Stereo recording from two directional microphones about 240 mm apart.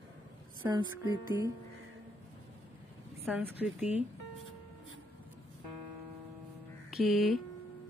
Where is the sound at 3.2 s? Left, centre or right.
Centre.